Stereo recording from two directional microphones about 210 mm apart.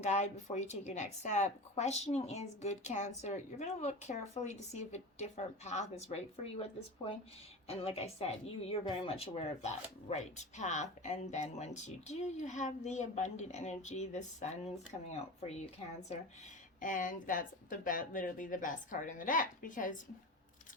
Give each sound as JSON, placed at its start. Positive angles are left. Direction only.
{"t": 0.0, "sound": "speech", "side_deg": 35}
{"t": 16.8, "sound": "speech", "side_deg": 40}